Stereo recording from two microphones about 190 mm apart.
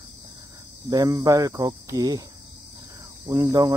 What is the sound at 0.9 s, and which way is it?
Speech, 15° right (ahead or behind).